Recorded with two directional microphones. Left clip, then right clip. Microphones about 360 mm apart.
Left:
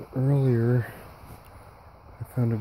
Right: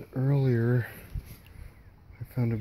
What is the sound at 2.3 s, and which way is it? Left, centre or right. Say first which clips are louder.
Speech: left 3 dB; centre.